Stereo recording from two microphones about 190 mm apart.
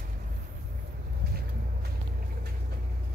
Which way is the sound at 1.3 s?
55° right (ahead or behind).